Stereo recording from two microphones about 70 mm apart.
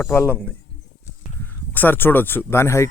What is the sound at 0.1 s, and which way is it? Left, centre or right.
Speech, left.